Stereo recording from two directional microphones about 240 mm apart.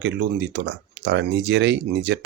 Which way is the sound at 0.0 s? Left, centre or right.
Right.